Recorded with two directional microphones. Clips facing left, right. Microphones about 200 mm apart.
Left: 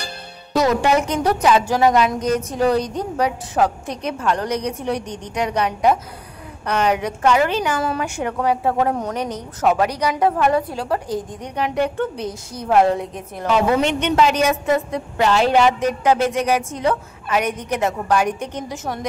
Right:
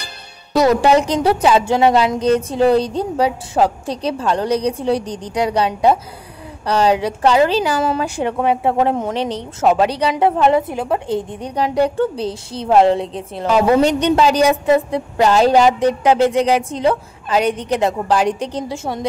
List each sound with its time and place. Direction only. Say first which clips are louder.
0.6 s a woman's voice: right 4 dB; 35° right (ahead or behind)